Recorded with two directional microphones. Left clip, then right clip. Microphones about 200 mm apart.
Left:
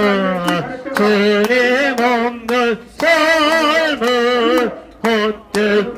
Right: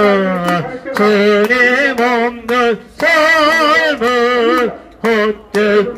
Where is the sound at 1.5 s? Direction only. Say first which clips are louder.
Right 3 dB; 30° right (ahead or behind).